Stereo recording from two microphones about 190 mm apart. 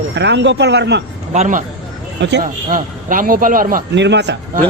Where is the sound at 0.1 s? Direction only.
65° right (ahead or behind).